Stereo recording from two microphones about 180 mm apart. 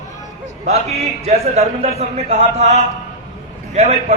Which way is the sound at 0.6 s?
40° right (ahead or behind).